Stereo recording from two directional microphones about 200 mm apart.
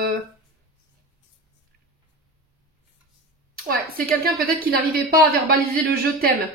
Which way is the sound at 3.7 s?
50° right (ahead or behind).